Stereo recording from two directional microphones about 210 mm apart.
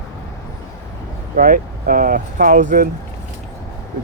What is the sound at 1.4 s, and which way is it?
Speech, 40° right (ahead or behind).